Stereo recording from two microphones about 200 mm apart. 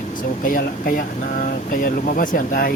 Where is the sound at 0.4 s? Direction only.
45° left (ahead or behind).